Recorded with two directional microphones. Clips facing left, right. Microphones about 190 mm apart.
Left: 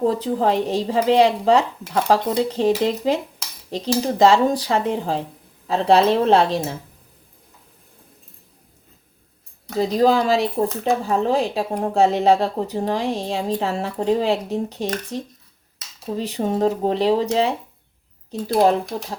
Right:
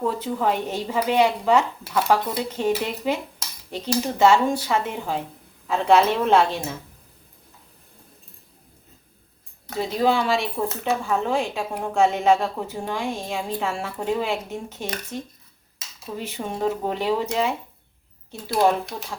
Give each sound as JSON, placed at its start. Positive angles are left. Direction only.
{"t": 0.0, "sound": "speech", "side_deg": 35}
{"t": 9.7, "sound": "speech", "side_deg": 35}